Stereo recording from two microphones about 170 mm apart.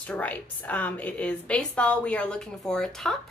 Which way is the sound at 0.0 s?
10° left (ahead or behind).